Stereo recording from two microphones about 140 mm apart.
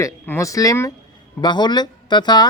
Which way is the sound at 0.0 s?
20° left (ahead or behind).